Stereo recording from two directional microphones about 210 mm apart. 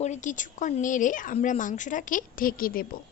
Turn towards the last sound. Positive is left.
turn(degrees=45)  # may be behind; listen again after turning